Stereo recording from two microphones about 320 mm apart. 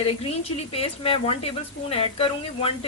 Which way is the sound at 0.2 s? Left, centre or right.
Centre.